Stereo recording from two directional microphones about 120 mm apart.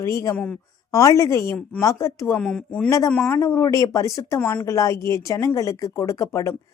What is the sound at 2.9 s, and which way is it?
Speech, 25° left (ahead or behind).